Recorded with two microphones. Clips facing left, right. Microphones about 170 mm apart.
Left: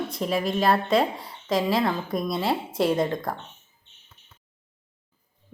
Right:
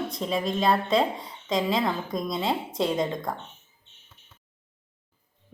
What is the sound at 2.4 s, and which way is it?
Speech, 20° right (ahead or behind).